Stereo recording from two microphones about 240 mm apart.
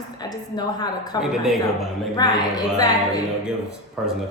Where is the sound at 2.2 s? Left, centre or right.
Centre.